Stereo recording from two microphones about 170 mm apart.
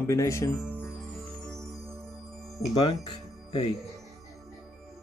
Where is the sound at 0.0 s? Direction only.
15° left (ahead or behind).